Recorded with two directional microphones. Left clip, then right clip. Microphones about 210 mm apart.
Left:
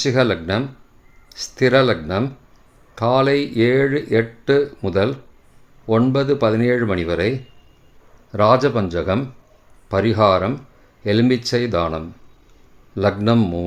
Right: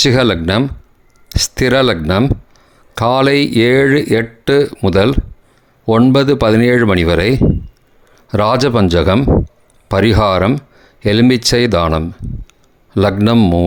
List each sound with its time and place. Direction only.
0.0 s speech: 45° right (ahead or behind)